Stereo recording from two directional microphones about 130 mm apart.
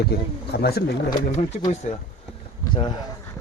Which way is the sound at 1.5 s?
60° left (ahead or behind).